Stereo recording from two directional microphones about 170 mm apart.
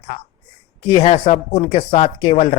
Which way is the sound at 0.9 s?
35° left (ahead or behind).